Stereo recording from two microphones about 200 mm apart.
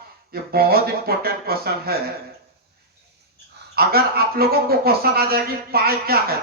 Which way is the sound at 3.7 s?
50° right (ahead or behind).